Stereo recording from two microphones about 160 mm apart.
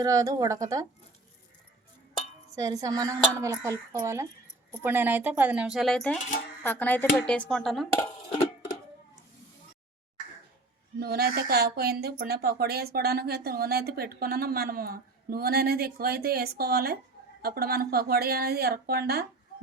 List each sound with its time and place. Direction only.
0.0 s speech: 20° right (ahead or behind)
2.6 s speech: 20° right (ahead or behind); by 7.9 s centre (ahead or behind)
8.3 s music: 30° left (ahead or behind)
11.0 s speech: 75° right (ahead or behind)